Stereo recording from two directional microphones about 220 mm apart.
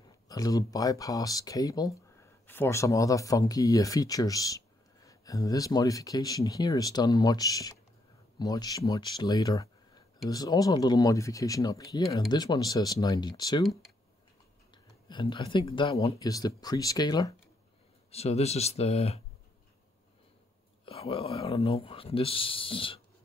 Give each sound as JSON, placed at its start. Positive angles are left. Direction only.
{"t": 0.3, "sound": "speech", "side_deg": 15}
{"t": 15.0, "sound": "speech", "side_deg": 20}
{"t": 18.1, "sound": "speech", "side_deg": 30}
{"t": 20.8, "sound": "speech", "side_deg": 25}